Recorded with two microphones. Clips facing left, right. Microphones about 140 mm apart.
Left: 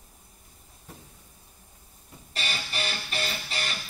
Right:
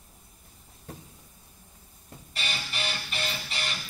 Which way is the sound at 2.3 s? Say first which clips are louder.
Left 2 dB; 40° left (ahead or behind).